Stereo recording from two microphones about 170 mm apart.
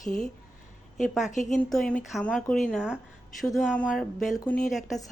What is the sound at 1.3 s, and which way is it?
Speech, 45° left (ahead or behind).